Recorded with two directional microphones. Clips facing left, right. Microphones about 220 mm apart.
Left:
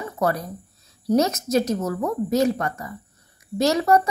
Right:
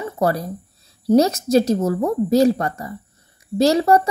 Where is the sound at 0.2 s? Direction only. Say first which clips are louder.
Right 3 dB; 35° right (ahead or behind).